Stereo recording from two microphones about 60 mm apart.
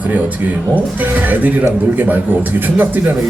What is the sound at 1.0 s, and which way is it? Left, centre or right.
Speech, right.